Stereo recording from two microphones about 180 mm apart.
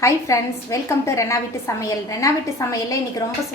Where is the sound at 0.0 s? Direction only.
15° left (ahead or behind).